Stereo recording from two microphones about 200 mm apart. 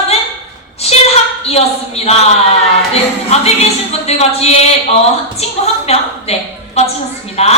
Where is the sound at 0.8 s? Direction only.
30° left (ahead or behind).